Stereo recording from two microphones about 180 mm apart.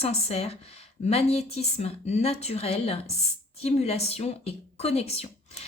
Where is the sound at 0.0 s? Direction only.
35° left (ahead or behind).